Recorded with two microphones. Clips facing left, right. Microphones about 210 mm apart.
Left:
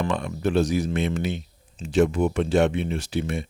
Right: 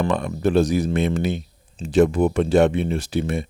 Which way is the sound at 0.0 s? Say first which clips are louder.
Right 4 dB; 40° right (ahead or behind).